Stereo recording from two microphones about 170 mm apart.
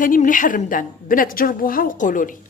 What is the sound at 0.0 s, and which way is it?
A woman's voice, 50° left (ahead or behind).